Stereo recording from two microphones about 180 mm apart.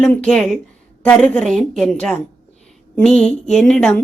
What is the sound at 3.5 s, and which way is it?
Speech, 5° left (ahead or behind).